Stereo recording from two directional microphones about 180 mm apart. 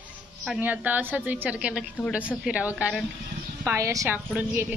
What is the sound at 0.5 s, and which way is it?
A woman's voice, 10° right (ahead or behind).